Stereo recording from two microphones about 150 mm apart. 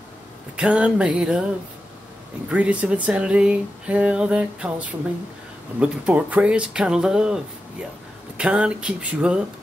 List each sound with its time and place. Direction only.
0.6 s speech: 5° right (ahead or behind)
2.5 s speech: 10° right (ahead or behind)